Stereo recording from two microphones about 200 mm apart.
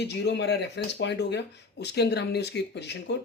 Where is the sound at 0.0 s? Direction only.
60° left (ahead or behind).